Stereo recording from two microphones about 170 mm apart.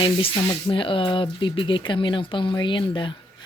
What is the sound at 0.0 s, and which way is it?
Speech, 30° left (ahead or behind).